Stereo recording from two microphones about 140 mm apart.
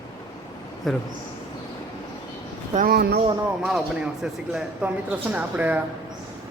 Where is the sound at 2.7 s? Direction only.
90° right.